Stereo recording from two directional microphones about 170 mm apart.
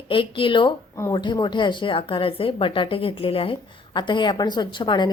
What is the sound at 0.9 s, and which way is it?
A woman's voice, 15° left (ahead or behind).